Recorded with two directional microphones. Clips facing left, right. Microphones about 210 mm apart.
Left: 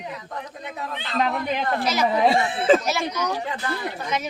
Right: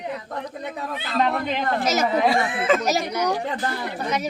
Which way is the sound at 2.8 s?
40° right (ahead or behind).